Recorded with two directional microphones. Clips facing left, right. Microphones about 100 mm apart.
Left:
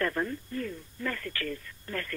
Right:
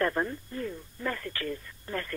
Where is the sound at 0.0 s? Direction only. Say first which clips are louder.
Right 2 dB; 25° right (ahead or behind).